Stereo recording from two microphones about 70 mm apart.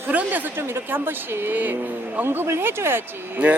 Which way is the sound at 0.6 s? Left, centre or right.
Right.